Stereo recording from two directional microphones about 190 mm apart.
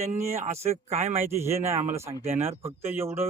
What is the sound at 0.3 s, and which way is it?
Speech, 35° right (ahead or behind).